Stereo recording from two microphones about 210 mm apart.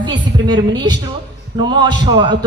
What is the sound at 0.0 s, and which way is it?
A woman's voice, 20° right (ahead or behind).